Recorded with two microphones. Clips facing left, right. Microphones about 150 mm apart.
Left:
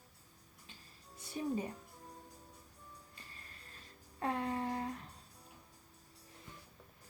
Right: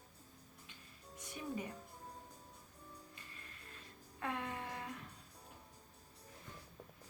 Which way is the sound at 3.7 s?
35° left (ahead or behind).